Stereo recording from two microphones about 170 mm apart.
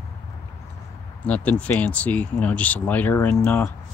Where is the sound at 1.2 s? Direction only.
10° left (ahead or behind).